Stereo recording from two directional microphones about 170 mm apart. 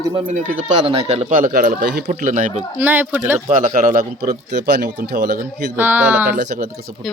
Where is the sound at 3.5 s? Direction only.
45° right (ahead or behind).